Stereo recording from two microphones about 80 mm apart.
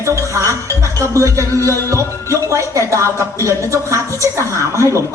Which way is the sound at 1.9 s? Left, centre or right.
Right.